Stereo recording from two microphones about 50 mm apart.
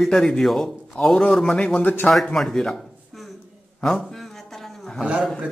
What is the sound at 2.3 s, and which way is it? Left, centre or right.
Speech, centre.